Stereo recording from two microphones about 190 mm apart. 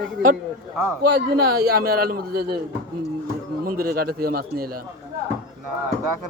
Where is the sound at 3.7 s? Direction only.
50° right (ahead or behind).